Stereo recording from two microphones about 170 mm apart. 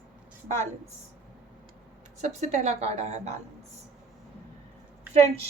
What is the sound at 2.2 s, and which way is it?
A woman's voice, 45° right (ahead or behind).